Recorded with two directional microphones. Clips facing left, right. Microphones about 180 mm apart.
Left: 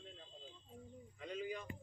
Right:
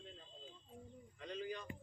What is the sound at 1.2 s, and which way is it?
Speech, 10° left (ahead or behind).